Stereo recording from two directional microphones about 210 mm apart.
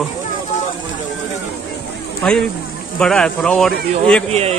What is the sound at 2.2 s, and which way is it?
Speech, 5° left (ahead or behind).